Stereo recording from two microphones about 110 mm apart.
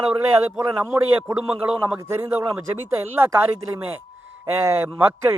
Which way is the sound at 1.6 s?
25° right (ahead or behind).